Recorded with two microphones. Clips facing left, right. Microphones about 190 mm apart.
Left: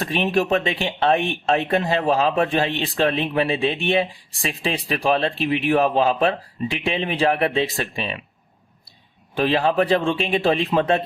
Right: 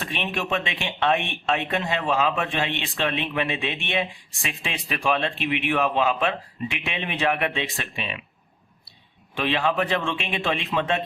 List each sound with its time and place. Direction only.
0.0 s speech: 40° left (ahead or behind)
9.3 s speech: 40° left (ahead or behind)